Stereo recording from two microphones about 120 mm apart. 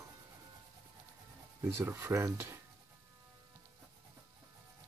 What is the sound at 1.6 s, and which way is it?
Speech, 25° right (ahead or behind).